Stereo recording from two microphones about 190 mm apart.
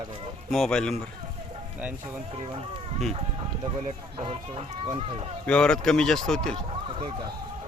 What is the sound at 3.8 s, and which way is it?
Speech, 30° right (ahead or behind).